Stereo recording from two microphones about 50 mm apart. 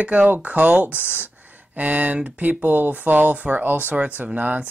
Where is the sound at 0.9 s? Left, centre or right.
Left.